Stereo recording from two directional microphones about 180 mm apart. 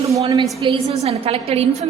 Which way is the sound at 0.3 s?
20° right (ahead or behind).